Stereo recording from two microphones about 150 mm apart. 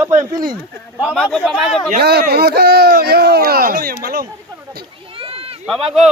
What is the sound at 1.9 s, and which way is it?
Speech, 90° right.